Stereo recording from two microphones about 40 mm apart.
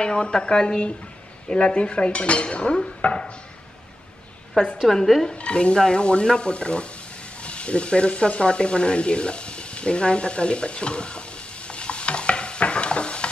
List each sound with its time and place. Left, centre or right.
0.0 s dishes: left
4.8 s speech: centre
5.3 s dishes: left
7.4 s sizzle: left